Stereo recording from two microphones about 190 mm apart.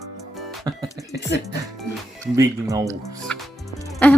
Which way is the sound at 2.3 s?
20° right (ahead or behind).